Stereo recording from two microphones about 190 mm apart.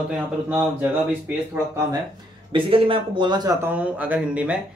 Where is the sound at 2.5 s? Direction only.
30° right (ahead or behind).